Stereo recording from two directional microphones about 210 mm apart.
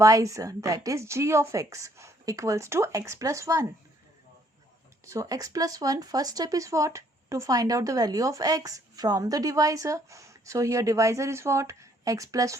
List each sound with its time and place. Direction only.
0.0 s speech: 15° right (ahead or behind)
5.0 s speech: 15° right (ahead or behind)